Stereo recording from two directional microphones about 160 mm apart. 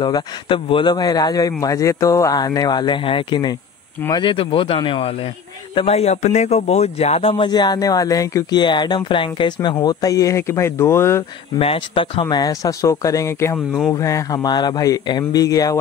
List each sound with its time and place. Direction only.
0.0 s a man's voice: 30° left (ahead or behind)
11.5 s a man's voice: 35° left (ahead or behind)